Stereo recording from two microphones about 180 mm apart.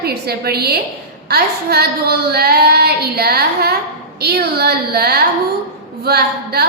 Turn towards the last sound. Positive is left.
turn(degrees=-60)  # may be behind; listen again after turning